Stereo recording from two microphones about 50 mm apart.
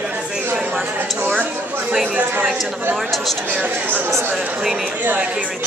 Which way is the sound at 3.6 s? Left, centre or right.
Right.